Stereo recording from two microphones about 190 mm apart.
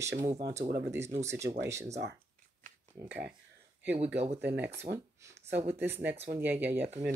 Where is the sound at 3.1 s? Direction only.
10° right (ahead or behind).